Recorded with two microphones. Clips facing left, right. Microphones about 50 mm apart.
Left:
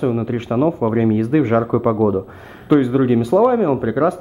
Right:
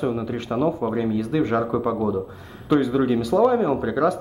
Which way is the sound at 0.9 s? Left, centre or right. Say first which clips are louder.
Left 7 dB; left.